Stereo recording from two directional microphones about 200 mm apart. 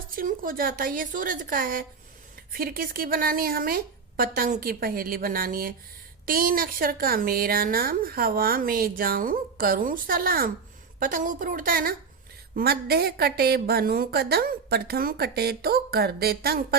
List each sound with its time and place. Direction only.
0.1 s speech: 45° right (ahead or behind)